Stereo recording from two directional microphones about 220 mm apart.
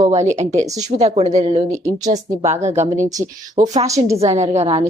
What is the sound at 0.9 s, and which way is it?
Speech, 30° right (ahead or behind).